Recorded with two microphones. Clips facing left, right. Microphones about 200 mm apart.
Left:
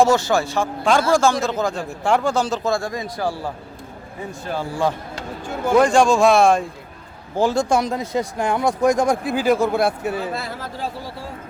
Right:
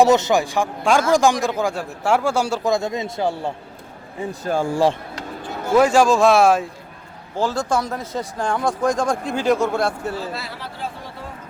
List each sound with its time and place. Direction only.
0.0 s a man's voice: 20° right (ahead or behind)
4.3 s speech: 45° right (ahead or behind)
5.7 s a man's voice: 5° right (ahead or behind)
7.3 s speech: 15° left (ahead or behind)
10.3 s speech: 50° left (ahead or behind)